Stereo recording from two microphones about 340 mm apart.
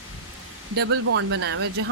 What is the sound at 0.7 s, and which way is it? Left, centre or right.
Speech, right.